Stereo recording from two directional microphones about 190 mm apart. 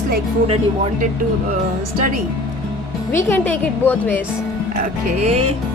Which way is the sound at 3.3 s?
10° left (ahead or behind).